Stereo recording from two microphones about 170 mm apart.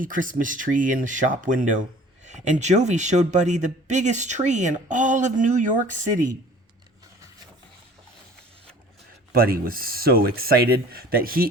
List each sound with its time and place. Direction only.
0.0 s speech: 50° right (ahead or behind)
9.3 s speech: 60° right (ahead or behind)